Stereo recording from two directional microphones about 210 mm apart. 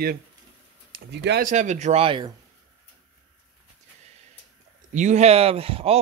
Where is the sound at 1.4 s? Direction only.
35° right (ahead or behind).